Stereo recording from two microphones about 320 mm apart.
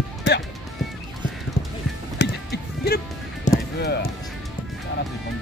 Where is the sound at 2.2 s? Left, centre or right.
Left.